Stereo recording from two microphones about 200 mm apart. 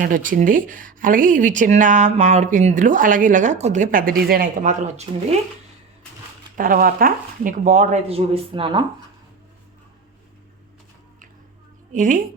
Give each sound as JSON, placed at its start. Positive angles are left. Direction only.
{"t": 0.0, "sound": "speech", "side_deg": -45}
{"t": 5.1, "sound": "speech", "side_deg": -25}
{"t": 6.6, "sound": "speech", "side_deg": -45}
{"t": 11.9, "sound": "speech", "side_deg": -40}